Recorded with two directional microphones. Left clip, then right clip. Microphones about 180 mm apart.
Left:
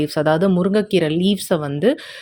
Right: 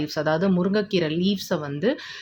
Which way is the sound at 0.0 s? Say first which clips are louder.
Left 6 dB; 40° left (ahead or behind).